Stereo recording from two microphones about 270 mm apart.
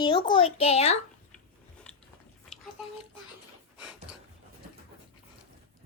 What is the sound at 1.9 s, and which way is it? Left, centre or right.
Biting, centre.